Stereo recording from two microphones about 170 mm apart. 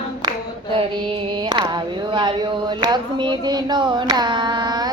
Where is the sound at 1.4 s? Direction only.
25° right (ahead or behind).